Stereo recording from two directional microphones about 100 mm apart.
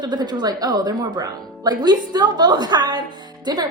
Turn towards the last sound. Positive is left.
turn(degrees=-45)  # may be behind; listen again after turning